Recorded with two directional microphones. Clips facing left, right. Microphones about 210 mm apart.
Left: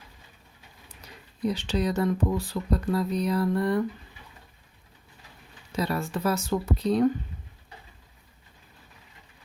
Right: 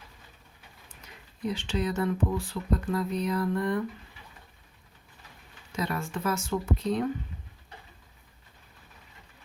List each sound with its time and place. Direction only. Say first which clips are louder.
1.4 s speech: left 3 dB; 40° left (ahead or behind)
5.7 s speech: left 4 dB; 35° left (ahead or behind)